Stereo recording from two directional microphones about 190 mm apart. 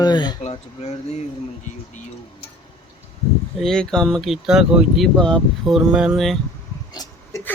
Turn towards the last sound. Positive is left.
turn(degrees=20)  # may be behind; listen again after turning